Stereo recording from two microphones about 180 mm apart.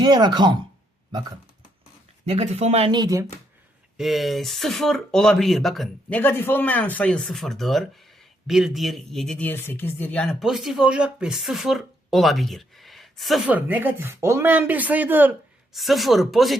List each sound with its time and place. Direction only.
0.0 s speech: 20° right (ahead or behind)
2.2 s speech: 35° right (ahead or behind)
3.9 s speech: centre (ahead or behind)